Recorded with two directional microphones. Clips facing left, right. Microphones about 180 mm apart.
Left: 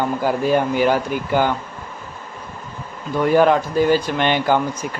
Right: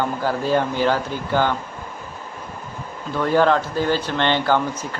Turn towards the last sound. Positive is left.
turn(degrees=15)  # may be behind; listen again after turning